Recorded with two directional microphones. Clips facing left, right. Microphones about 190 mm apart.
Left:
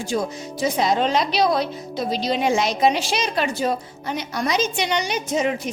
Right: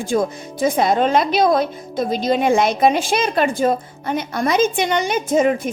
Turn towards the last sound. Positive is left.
turn(degrees=-50)  # may be behind; listen again after turning